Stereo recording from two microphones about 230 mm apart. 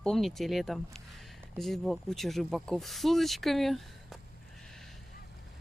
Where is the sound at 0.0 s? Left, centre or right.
Centre.